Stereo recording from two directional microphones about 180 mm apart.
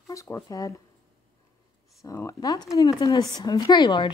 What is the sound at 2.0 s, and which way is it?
Speech, 15° left (ahead or behind).